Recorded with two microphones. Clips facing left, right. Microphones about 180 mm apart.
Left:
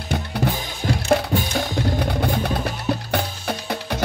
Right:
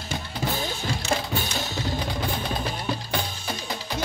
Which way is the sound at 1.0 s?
55° left (ahead or behind).